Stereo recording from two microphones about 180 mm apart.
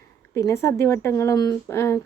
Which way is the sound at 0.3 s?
15° left (ahead or behind).